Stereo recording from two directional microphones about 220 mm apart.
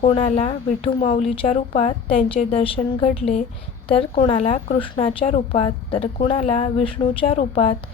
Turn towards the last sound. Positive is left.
turn(degrees=25)  # may be behind; listen again after turning